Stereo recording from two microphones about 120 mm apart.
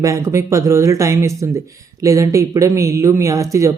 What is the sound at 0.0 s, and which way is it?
Speech, 25° right (ahead or behind).